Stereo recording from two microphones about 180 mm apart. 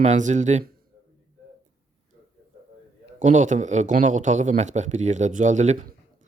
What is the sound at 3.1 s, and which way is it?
A man's voice, 45° right (ahead or behind).